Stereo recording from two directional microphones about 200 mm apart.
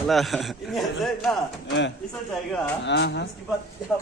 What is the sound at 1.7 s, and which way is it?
Speech, 65° left (ahead or behind).